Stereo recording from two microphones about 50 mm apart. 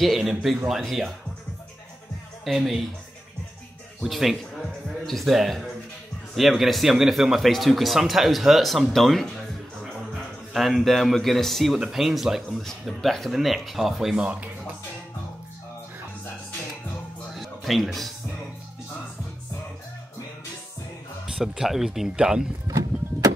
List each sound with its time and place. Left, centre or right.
0.0 s a man's voice: centre
2.4 s a man's voice: centre
4.0 s a man's voice: centre
10.5 s a man's voice: centre
13.0 s a man's voice: centre
14.1 s speech: right
17.3 s music: centre
21.3 s speech: centre